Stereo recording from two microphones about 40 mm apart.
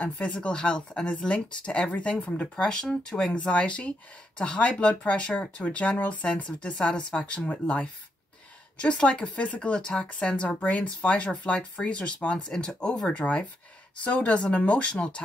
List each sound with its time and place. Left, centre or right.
0.4 s speech: left
2.4 s speech: centre
3.3 s speech: left
8.8 s speech: left
12.4 s speech: left